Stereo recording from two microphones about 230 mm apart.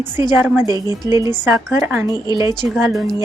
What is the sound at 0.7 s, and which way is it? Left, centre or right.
Speech, centre.